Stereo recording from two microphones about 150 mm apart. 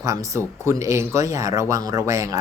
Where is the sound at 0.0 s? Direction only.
20° right (ahead or behind).